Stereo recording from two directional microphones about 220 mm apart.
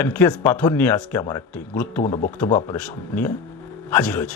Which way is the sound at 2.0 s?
35° left (ahead or behind).